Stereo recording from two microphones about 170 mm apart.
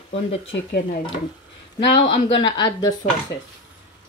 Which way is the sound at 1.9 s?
30° left (ahead or behind).